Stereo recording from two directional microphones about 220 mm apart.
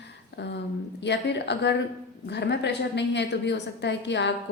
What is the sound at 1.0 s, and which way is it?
A woman's voice, 50° left (ahead or behind).